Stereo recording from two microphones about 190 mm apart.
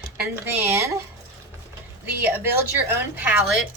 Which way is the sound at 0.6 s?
15° right (ahead or behind).